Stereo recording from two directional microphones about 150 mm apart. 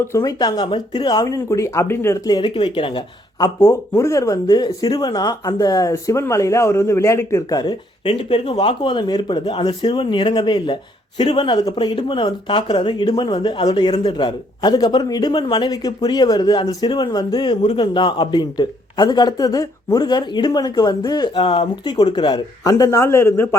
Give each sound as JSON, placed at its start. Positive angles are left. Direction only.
{"t": 0.0, "sound": "speech", "side_deg": 20}
{"t": 8.0, "sound": "speech", "side_deg": 35}
{"t": 9.4, "sound": "speech", "side_deg": 45}
{"t": 9.6, "sound": "speech", "side_deg": 30}